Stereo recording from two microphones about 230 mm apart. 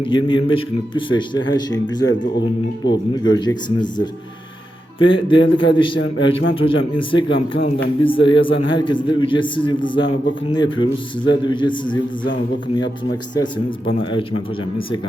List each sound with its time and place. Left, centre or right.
0.1 s a man's voice: centre
4.9 s a man's voice: left
6.4 s a man's voice: left
8.0 s a man's voice: left
14.0 s a man's voice: left